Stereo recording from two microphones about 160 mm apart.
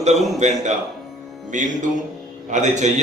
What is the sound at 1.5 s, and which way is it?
A man's voice, 50° right (ahead or behind).